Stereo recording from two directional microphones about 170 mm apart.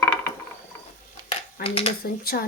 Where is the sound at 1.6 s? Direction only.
35° left (ahead or behind).